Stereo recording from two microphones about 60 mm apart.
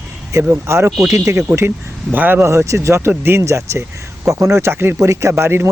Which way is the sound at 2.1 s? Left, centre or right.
Right.